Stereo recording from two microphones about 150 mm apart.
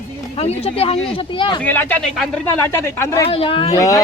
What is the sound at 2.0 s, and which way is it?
Speech, centre (ahead or behind).